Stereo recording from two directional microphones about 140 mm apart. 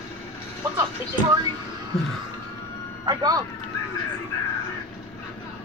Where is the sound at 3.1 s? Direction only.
25° right (ahead or behind).